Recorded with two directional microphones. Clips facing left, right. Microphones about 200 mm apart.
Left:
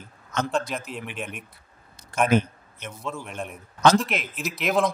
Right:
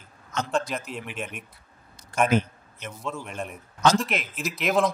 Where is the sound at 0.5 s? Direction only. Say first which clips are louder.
Even; centre (ahead or behind).